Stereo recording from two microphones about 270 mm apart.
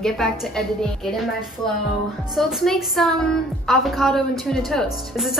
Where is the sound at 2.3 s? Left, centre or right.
Centre.